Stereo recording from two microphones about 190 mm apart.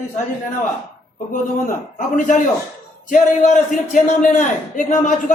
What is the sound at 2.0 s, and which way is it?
A man's voice, 40° left (ahead or behind).